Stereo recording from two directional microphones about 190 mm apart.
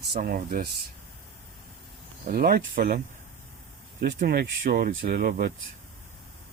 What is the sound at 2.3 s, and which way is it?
Speech, 50° right (ahead or behind).